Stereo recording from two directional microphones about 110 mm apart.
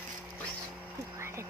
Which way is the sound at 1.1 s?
25° right (ahead or behind).